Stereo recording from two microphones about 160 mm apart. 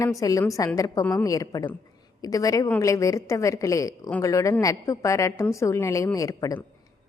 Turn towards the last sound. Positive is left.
turn(degrees=20)  # may be behind; listen again after turning